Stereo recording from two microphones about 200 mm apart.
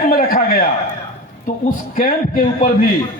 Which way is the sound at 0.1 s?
45° left (ahead or behind).